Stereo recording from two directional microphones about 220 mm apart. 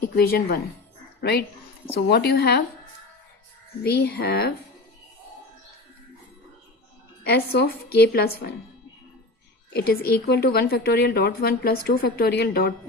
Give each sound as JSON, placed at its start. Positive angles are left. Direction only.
{"t": 0.0, "sound": "a woman's voice", "side_deg": 45}
{"t": 2.0, "sound": "a woman's voice", "side_deg": 45}
{"t": 3.8, "sound": "a woman's voice", "side_deg": 50}
{"t": 7.2, "sound": "a woman's voice", "side_deg": 45}
{"t": 9.7, "sound": "a woman's voice", "side_deg": 45}